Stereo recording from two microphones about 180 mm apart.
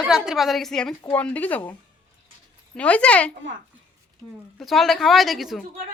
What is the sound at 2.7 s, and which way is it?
Speech, 5° left (ahead or behind).